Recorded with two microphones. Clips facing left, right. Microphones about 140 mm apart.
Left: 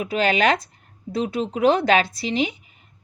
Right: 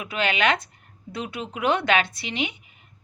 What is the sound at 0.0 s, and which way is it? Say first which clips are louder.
A woman's voice: left 4 dB; 40° left (ahead or behind).